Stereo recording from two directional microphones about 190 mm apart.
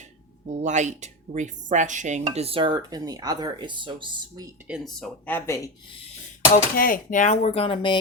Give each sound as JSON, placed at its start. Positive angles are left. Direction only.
{"t": 0.6, "sound": "dishes", "side_deg": -40}
{"t": 4.7, "sound": "speech", "side_deg": 0}
{"t": 6.5, "sound": "speech", "side_deg": 45}